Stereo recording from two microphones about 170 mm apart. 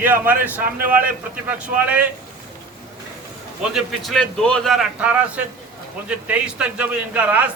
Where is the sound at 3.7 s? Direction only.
Centre (ahead or behind).